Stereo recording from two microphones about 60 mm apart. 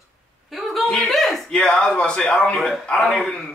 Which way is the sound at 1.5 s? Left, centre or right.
Centre.